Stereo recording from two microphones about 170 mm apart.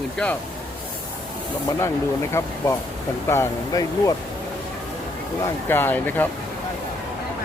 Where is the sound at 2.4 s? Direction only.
15° left (ahead or behind).